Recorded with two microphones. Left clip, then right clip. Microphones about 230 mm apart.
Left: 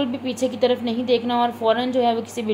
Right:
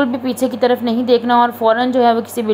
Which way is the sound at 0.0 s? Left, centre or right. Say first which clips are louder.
Right 6 dB; right.